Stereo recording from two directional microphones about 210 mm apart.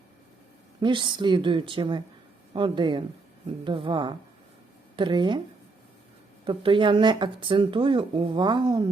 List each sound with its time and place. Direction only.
0.8 s speech: 25° right (ahead or behind)
6.4 s speech: 25° right (ahead or behind)